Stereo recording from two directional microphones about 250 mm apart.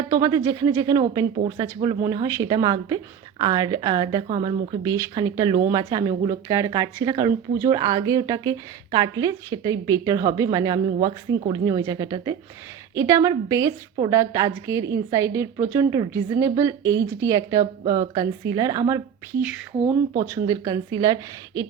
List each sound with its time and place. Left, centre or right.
0.1 s a woman's voice: centre